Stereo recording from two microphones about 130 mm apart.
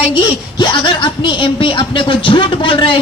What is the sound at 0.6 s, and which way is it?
Speech, 35° left (ahead or behind).